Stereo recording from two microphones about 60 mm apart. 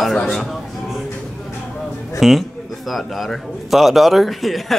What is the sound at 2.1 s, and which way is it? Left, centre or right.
A man's voice, centre.